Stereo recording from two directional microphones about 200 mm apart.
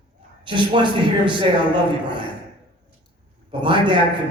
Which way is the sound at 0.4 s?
25° right (ahead or behind).